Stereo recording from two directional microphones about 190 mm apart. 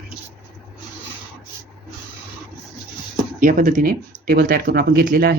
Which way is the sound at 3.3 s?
45° right (ahead or behind).